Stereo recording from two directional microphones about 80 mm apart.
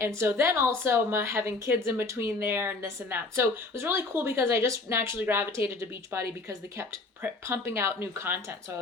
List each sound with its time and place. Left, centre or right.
0.2 s speech: right